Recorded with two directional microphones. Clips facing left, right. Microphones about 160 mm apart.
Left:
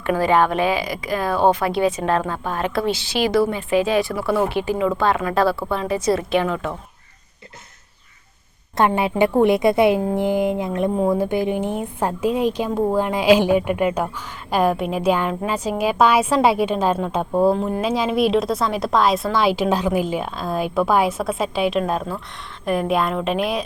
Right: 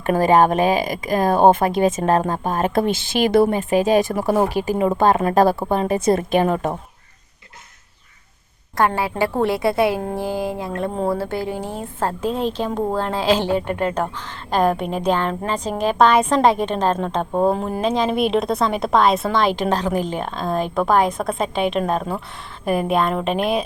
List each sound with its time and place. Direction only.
0.0 s speech: 45° right (ahead or behind)
9.0 s a woman's voice: 20° left (ahead or behind); by 23.6 s centre (ahead or behind)